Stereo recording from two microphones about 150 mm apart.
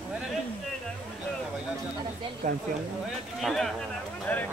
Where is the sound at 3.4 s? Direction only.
Centre (ahead or behind).